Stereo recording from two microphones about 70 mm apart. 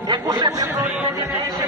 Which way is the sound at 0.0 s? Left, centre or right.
Right.